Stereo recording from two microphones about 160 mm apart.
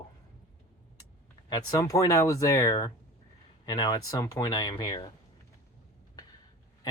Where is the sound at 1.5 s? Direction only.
20° left (ahead or behind).